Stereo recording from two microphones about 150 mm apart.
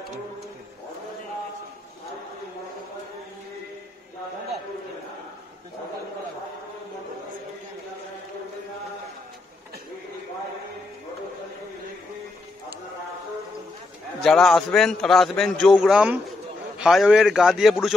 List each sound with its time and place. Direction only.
14.2 s a man's voice: centre (ahead or behind)